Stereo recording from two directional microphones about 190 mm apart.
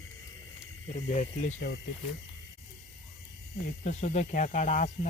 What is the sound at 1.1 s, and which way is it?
Speech, 35° left (ahead or behind).